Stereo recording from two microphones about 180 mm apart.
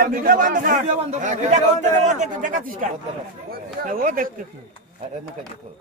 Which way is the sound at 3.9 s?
50° right (ahead or behind).